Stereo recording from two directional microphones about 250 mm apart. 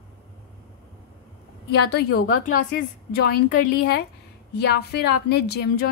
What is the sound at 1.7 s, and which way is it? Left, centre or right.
Speech, left.